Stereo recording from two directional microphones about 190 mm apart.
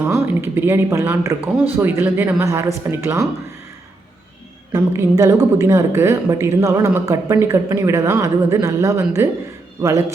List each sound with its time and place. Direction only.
0.0 s a woman's voice: 10° right (ahead or behind)
4.7 s a woman's voice: 15° right (ahead or behind)